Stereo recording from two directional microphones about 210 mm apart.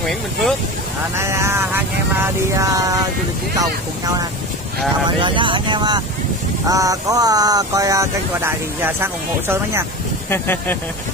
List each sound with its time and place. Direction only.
0.0 s speech: centre (ahead or behind)
1.1 s speech: 15° right (ahead or behind)
5.2 s speech: 25° right (ahead or behind)
10.3 s speech: 10° left (ahead or behind)